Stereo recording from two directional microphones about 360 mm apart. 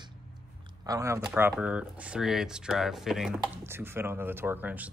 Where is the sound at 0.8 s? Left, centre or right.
Centre.